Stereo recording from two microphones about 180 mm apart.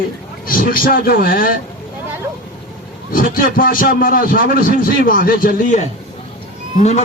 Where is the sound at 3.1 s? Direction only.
50° left (ahead or behind).